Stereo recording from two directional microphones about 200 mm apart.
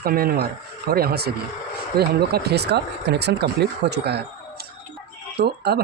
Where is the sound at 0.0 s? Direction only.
50° right (ahead or behind).